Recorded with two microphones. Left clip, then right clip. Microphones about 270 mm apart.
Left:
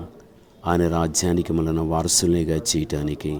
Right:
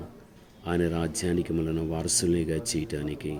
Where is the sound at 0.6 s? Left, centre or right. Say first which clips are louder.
Left 7 dB; left.